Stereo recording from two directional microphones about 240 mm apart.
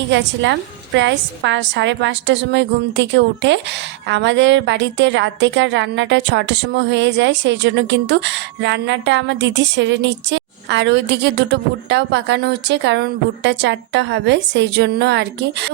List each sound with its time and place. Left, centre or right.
0.9 s a woman's voice: right